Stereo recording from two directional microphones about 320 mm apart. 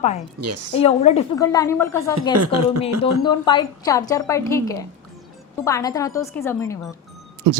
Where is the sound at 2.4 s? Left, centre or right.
Right.